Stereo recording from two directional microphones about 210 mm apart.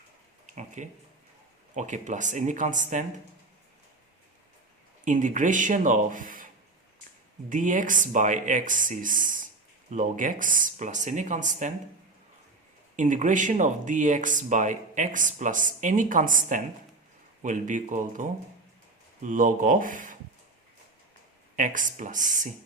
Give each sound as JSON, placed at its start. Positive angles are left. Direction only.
{"t": 0.4, "sound": "speech", "side_deg": -35}
{"t": 5.0, "sound": "speech", "side_deg": -35}
{"t": 7.5, "sound": "speech", "side_deg": -40}
{"t": 13.0, "sound": "speech", "side_deg": -35}
{"t": 21.5, "sound": "speech", "side_deg": -40}